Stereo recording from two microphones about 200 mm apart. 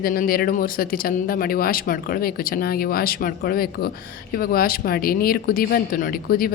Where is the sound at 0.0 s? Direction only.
45° left (ahead or behind).